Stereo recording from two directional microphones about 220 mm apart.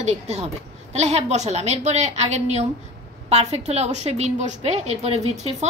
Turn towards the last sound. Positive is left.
turn(degrees=-30)  # may be behind; listen again after turning